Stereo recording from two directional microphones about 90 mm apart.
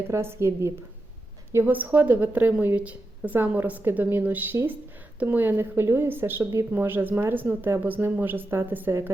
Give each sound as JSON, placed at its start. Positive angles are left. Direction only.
{"t": 0.1, "sound": "a woman's voice", "side_deg": -30}
{"t": 1.5, "sound": "a woman's voice", "side_deg": -20}